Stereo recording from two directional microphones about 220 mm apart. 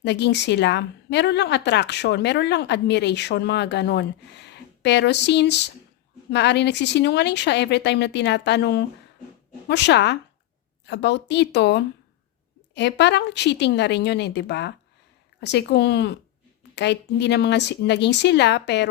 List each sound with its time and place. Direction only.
0.0 s a woman's voice: 50° left (ahead or behind)